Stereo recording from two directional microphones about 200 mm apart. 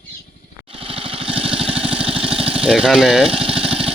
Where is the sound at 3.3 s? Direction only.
30° right (ahead or behind).